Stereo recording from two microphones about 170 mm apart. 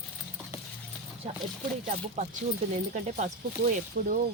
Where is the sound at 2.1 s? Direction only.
45° right (ahead or behind).